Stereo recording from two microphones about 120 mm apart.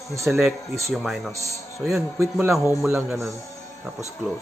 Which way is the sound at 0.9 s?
Centre (ahead or behind).